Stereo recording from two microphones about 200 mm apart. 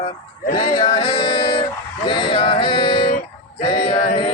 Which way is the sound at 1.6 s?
25° left (ahead or behind).